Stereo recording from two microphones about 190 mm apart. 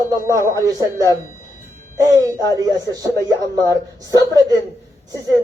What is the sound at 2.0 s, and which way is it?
Speech, 15° right (ahead or behind).